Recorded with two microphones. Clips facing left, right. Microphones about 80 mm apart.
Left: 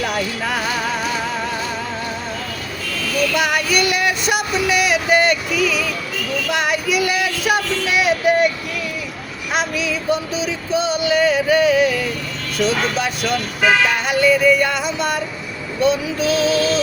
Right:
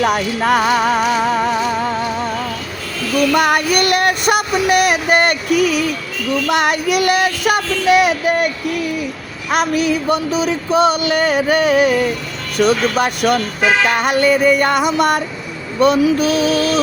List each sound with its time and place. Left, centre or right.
0.0 s music: right
3.3 s female singing: right
6.5 s child singing: right
9.5 s a sound: right